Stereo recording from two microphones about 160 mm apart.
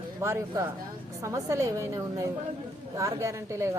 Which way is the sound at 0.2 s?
20° right (ahead or behind).